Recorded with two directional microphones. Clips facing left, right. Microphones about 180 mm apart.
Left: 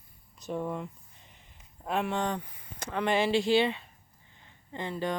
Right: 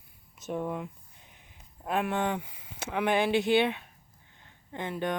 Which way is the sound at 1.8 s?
Centre (ahead or behind).